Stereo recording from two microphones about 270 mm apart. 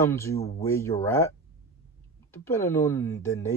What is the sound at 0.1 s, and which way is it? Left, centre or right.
Speech, centre.